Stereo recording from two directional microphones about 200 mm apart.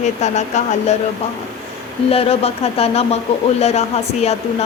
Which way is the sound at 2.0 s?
30° left (ahead or behind).